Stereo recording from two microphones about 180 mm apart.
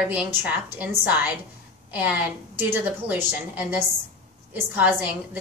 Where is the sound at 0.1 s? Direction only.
5° right (ahead or behind).